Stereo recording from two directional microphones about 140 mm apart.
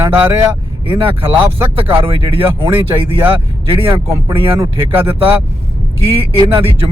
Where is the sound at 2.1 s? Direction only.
40° right (ahead or behind).